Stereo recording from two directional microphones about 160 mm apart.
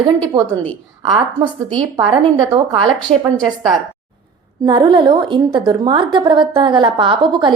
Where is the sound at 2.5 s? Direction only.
30° right (ahead or behind).